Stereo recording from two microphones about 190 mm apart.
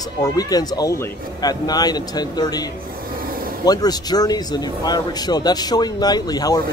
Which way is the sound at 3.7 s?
20° left (ahead or behind).